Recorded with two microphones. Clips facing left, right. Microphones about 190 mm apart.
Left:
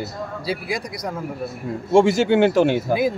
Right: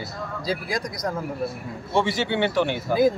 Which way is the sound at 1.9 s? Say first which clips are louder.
Left 8 dB; 45° left (ahead or behind).